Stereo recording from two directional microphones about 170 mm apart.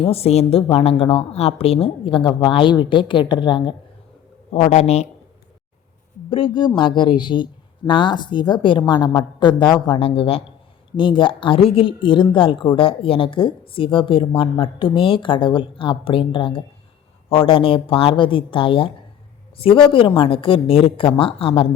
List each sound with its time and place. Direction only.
0.0 s a woman's voice: 35° left (ahead or behind)
4.5 s a woman's voice: 40° left (ahead or behind)
6.3 s a woman's voice: 30° left (ahead or behind)